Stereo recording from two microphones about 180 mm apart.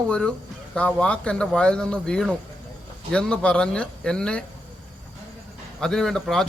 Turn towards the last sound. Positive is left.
turn(degrees=5)  # may be behind; listen again after turning